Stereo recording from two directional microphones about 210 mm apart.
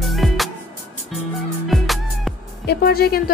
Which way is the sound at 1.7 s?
Centre (ahead or behind).